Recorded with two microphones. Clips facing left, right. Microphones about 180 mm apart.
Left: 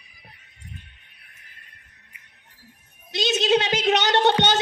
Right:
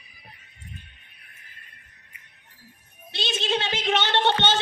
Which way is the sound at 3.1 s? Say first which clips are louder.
Left 7 dB; 40° left (ahead or behind).